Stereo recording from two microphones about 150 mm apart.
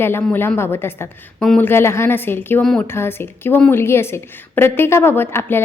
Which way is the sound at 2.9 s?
15° left (ahead or behind).